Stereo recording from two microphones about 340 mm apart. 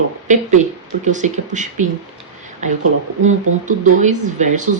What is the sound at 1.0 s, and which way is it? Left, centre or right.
Speech, right.